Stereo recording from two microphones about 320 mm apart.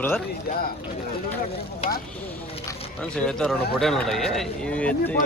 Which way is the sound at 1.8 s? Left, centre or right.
Left.